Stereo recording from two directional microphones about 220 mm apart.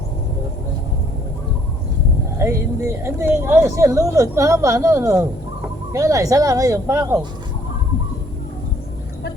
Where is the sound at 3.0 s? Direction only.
10° right (ahead or behind).